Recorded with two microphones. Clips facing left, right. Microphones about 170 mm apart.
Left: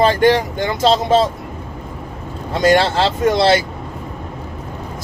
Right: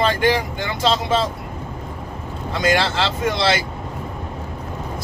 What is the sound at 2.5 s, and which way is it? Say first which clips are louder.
Speech: left 6 dB; 40° left (ahead or behind).